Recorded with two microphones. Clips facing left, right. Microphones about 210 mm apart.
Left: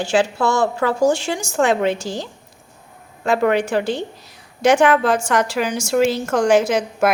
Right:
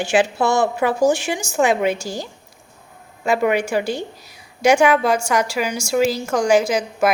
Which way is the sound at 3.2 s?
5° right (ahead or behind).